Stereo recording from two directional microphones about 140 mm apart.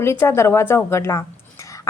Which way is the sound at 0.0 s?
20° left (ahead or behind).